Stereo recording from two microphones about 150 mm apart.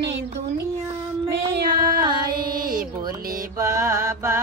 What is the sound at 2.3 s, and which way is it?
Child singing, 75° right (ahead or behind).